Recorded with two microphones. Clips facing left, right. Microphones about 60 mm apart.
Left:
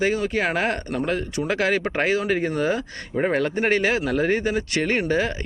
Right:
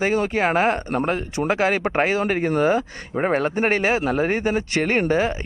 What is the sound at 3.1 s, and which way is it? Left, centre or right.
Speech, centre.